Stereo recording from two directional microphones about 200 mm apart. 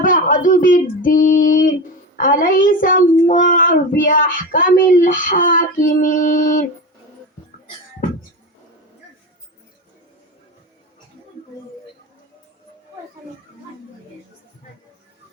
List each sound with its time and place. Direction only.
0.0 s a child's voice: 45° left (ahead or behind)